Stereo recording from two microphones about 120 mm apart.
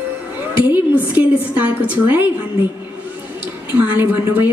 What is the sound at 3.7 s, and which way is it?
Speech, 15° right (ahead or behind).